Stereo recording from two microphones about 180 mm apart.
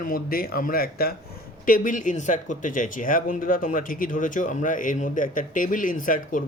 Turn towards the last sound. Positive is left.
turn(degrees=45)  # may be behind; listen again after turning